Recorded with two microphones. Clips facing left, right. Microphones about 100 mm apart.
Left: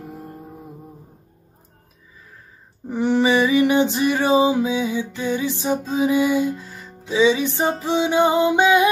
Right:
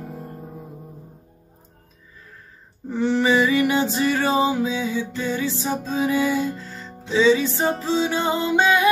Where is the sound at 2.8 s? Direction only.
15° left (ahead or behind).